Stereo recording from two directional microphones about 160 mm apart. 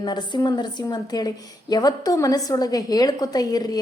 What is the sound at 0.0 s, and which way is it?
A woman's voice, 25° left (ahead or behind).